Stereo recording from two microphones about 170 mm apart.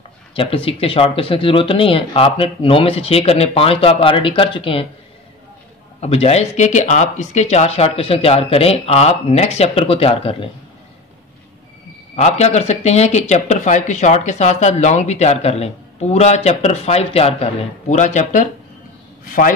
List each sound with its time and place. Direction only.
0.3 s speech: 30° left (ahead or behind)
5.9 s speech: 40° left (ahead or behind)
12.2 s a man's voice: 40° left (ahead or behind)